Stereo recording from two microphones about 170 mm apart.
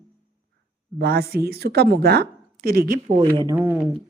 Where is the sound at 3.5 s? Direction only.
10° right (ahead or behind).